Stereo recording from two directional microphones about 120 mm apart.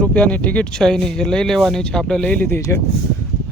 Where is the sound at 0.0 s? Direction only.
10° left (ahead or behind).